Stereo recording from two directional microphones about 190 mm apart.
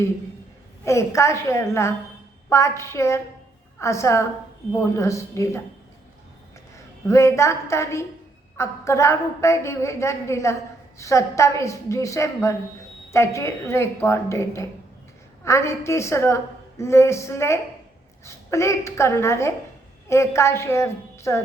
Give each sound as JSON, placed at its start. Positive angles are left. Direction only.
{"t": 0.9, "sound": "a woman's voice", "side_deg": 15}
{"t": 7.1, "sound": "a woman's voice", "side_deg": 15}